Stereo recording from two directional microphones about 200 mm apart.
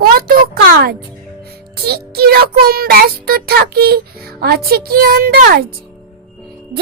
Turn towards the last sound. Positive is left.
turn(degrees=-50)  # may be behind; listen again after turning